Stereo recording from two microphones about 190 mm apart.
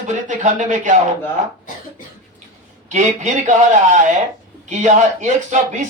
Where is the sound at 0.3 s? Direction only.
40° right (ahead or behind).